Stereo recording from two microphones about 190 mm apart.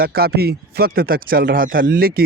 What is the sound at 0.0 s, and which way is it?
Speech, 55° right (ahead or behind).